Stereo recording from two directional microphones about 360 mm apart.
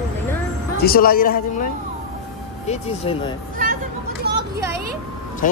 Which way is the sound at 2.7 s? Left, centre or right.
Centre.